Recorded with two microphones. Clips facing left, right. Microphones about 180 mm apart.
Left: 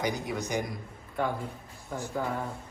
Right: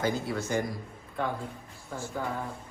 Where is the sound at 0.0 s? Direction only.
15° left (ahead or behind).